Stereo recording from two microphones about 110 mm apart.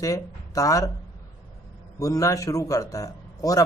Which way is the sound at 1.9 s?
30° left (ahead or behind).